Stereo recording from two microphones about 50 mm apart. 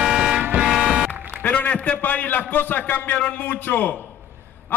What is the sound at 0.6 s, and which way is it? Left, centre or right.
Music, centre.